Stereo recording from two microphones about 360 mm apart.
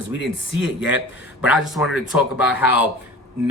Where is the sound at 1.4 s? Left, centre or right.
Centre.